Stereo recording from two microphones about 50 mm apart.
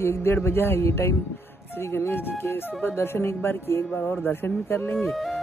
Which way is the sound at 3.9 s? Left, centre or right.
Left.